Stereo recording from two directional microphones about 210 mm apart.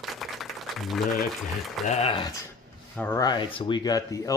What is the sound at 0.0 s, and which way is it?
Applause, centre (ahead or behind).